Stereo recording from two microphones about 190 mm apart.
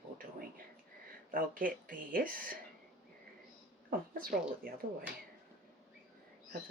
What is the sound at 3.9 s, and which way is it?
Speech, 50° right (ahead or behind).